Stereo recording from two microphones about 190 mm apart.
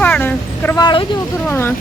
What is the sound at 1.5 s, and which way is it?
Speech, 10° left (ahead or behind).